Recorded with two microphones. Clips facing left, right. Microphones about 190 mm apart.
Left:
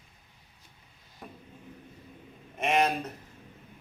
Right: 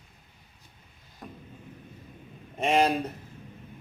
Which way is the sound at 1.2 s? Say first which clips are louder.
Right 2 dB; centre (ahead or behind).